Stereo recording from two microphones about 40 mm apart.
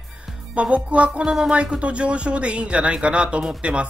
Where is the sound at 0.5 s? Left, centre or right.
Right.